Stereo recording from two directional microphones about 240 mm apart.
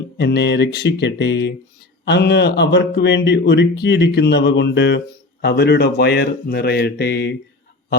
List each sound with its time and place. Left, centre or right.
0.2 s speech: left